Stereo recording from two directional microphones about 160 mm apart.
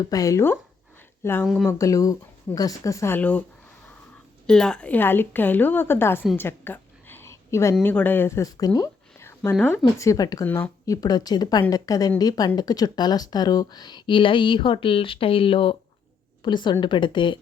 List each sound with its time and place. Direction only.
0.0 s speech: 20° left (ahead or behind)
4.4 s a woman's voice: 5° left (ahead or behind); by 17.4 s 30° left (ahead or behind)